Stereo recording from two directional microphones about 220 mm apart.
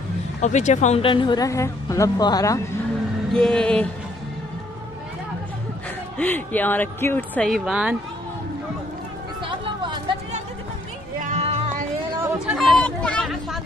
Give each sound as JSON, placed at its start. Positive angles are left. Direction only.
{"t": 0.4, "sound": "speech", "side_deg": 30}
{"t": 3.3, "sound": "music", "side_deg": 5}
{"t": 6.1, "sound": "speech", "side_deg": 5}
{"t": 9.4, "sound": "a sound", "side_deg": -20}
{"t": 11.1, "sound": "music", "side_deg": -30}
{"t": 12.4, "sound": "a sound", "side_deg": 0}